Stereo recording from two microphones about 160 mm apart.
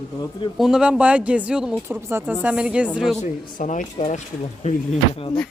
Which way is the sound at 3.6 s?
50° left (ahead or behind).